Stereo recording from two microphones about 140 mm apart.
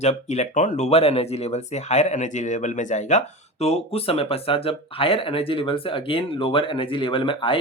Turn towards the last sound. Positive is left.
turn(degrees=35)  # may be behind; listen again after turning